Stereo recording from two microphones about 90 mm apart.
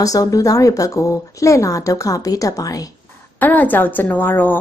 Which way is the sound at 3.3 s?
20° left (ahead or behind).